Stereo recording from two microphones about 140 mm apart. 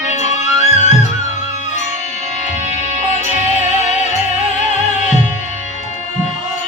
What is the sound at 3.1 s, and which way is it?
Music, 55° left (ahead or behind).